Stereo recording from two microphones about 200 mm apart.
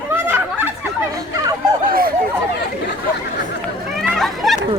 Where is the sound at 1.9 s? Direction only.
45° right (ahead or behind).